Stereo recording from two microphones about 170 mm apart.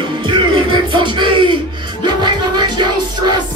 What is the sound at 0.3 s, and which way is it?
Music, 30° right (ahead or behind).